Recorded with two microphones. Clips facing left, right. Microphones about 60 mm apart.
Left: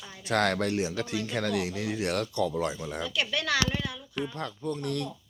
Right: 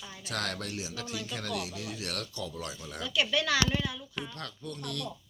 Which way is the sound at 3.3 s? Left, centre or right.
Left.